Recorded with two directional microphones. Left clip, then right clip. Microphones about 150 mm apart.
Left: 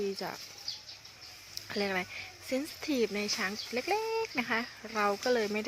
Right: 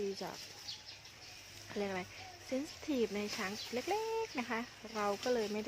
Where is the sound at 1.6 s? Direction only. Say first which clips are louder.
Left 7 dB; 15° left (ahead or behind).